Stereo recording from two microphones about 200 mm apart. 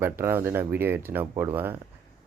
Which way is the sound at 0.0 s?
10° right (ahead or behind).